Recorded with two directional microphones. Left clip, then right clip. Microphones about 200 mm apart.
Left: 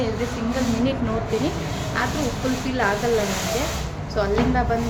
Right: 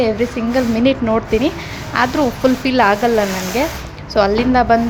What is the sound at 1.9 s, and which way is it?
Speech, 50° right (ahead or behind).